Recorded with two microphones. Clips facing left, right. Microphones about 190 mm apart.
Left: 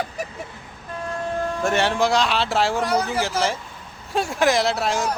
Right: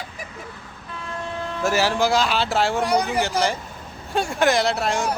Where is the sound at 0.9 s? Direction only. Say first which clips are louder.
Left 5 dB; 45° left (ahead or behind).